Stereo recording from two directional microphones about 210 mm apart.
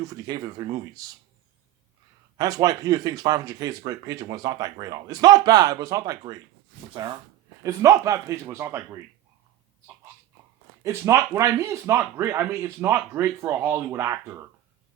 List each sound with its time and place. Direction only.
0.0 s speech: 15° right (ahead or behind)
2.4 s speech: 15° right (ahead or behind)
10.8 s speech: 15° right (ahead or behind)